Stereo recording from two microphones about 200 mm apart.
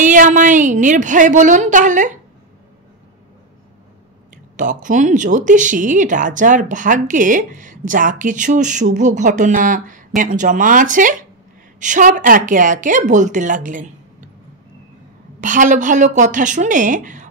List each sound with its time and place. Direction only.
0.1 s speech: 40° right (ahead or behind)
4.6 s speech: 40° right (ahead or behind)
15.4 s speech: 40° right (ahead or behind)